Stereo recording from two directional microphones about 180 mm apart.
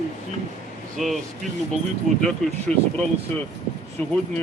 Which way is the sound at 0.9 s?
Centre (ahead or behind).